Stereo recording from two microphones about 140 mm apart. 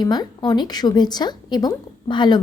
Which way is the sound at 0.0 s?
30° left (ahead or behind).